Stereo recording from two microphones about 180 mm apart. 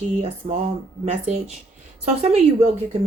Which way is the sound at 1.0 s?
40° right (ahead or behind).